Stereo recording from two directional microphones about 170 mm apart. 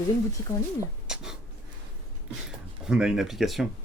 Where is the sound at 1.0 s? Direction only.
5° right (ahead or behind).